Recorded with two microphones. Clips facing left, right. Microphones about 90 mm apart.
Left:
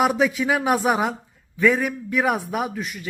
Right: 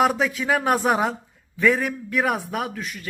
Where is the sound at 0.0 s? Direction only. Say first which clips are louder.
Left 1 dB; 5° left (ahead or behind).